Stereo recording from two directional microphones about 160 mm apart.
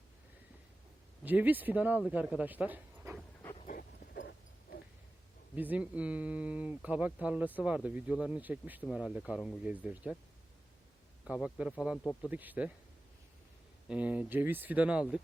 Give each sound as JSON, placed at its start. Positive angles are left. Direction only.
{"t": 1.2, "sound": "speech", "side_deg": -10}
{"t": 3.7, "sound": "a sound", "side_deg": 75}
{"t": 5.5, "sound": "speech", "side_deg": -10}
{"t": 11.3, "sound": "speech", "side_deg": -5}
{"t": 13.8, "sound": "speech", "side_deg": -10}